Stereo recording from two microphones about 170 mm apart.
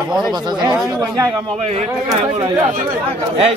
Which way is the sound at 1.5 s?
40° right (ahead or behind).